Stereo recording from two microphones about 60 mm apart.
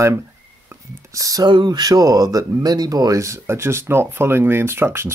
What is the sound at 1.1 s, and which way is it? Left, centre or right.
Speech, right.